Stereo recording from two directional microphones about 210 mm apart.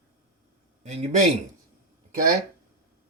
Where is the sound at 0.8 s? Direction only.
35° right (ahead or behind).